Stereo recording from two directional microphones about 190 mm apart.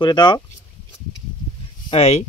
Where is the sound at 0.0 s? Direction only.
25° left (ahead or behind).